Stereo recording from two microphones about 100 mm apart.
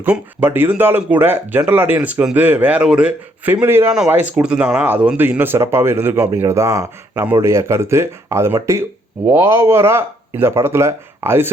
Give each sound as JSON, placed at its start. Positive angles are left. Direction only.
{"t": 0.0, "sound": "speech", "side_deg": -15}